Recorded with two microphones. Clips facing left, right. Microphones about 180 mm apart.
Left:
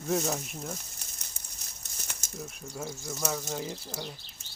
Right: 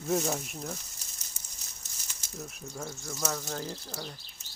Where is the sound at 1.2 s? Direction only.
60° left (ahead or behind).